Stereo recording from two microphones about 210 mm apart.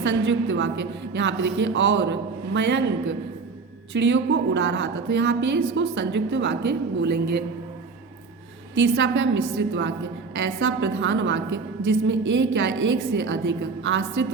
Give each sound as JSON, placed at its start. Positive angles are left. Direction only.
{"t": 0.0, "sound": "a woman's voice", "side_deg": -65}
{"t": 8.7, "sound": "a woman's voice", "side_deg": -60}